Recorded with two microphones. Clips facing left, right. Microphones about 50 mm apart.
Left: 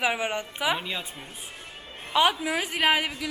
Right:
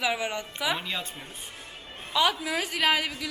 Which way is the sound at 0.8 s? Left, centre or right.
Centre.